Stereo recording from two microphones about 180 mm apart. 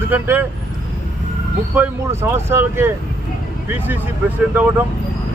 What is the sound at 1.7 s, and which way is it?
Speech, 10° right (ahead or behind).